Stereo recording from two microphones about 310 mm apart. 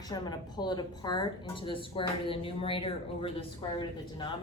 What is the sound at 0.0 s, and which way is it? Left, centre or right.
Speech, centre.